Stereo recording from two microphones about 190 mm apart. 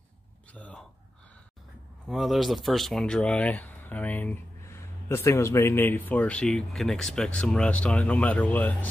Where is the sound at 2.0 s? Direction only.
Centre (ahead or behind).